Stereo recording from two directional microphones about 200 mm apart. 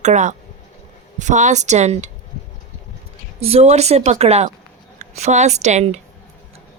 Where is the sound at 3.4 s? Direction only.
30° right (ahead or behind).